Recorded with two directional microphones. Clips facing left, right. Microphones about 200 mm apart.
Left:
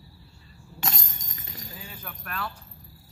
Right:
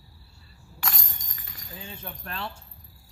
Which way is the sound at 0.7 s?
25° left (ahead or behind).